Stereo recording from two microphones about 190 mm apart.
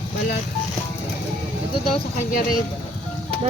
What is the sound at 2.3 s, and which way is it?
Speech, 45° left (ahead or behind).